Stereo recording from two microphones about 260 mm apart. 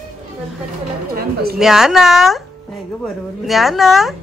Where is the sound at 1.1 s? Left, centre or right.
Right.